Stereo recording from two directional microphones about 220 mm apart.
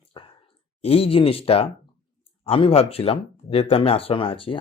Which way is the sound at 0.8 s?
25° left (ahead or behind).